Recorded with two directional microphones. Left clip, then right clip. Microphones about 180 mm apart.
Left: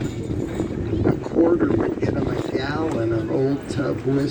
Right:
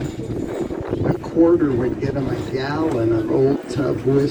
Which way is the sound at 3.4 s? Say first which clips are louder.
Right 4 dB; 40° left (ahead or behind).